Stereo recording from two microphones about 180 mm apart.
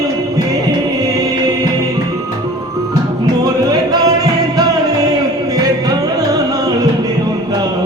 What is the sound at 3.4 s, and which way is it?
Music, 20° right (ahead or behind).